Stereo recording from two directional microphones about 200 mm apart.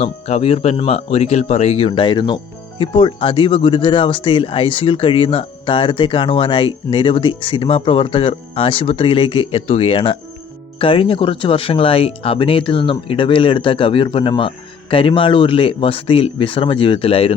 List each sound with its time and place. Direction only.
0.0 s speech: 30° left (ahead or behind)